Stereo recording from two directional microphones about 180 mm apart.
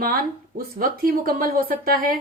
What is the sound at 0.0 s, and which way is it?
A woman's voice, 55° right (ahead or behind).